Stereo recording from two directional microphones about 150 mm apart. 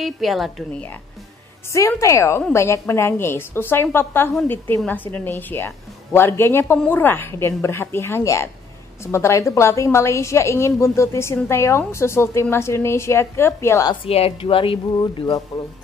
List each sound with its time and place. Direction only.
0.0 s a woman's voice: centre (ahead or behind)
1.7 s a woman's voice: 20° left (ahead or behind)
14.0 s speech: 40° left (ahead or behind)